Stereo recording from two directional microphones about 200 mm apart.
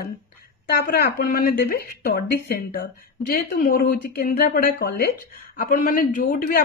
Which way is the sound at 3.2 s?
45° left (ahead or behind).